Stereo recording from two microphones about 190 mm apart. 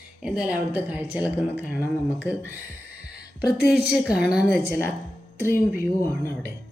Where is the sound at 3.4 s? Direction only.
55° left (ahead or behind).